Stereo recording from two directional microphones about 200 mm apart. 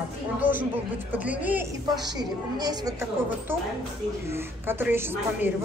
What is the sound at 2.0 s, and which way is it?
Speech, 20° right (ahead or behind).